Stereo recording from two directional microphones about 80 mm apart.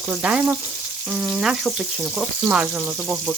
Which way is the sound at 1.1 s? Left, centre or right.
Centre.